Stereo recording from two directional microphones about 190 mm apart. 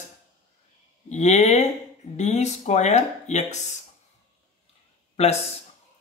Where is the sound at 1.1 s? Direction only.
35° left (ahead or behind).